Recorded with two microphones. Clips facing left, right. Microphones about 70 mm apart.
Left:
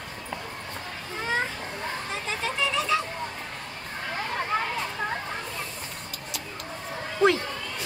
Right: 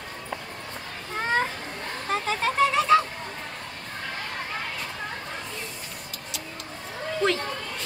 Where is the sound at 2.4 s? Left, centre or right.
Right.